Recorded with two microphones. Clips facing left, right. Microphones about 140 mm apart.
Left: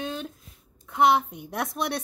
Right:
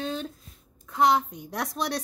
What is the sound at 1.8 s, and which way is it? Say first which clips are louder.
Speech: even; 10° left (ahead or behind).